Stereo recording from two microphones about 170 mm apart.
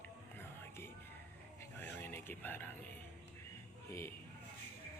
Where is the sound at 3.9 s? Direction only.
15° left (ahead or behind).